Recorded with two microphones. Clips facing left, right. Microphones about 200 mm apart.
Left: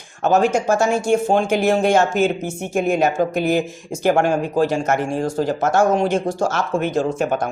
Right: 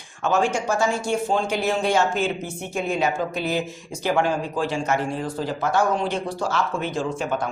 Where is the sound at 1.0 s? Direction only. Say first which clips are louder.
Left 6 dB; 50° left (ahead or behind).